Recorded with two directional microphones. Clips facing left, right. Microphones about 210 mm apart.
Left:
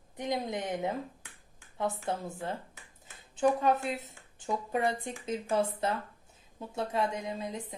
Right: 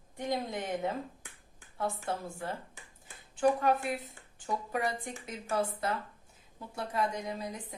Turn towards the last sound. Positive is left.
turn(degrees=25)  # may be behind; listen again after turning